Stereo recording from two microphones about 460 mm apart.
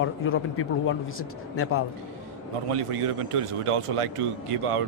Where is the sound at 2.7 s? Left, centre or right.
Right.